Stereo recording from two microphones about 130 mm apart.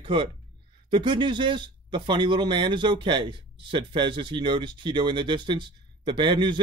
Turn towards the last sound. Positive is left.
turn(degrees=-35)  # may be behind; listen again after turning